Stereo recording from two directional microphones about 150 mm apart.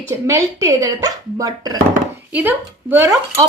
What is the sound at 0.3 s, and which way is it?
Speech, 20° right (ahead or behind).